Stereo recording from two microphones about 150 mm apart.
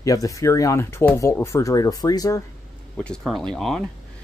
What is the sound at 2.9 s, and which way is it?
Speech, 5° left (ahead or behind).